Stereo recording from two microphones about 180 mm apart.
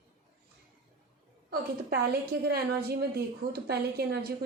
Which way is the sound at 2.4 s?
60° right (ahead or behind).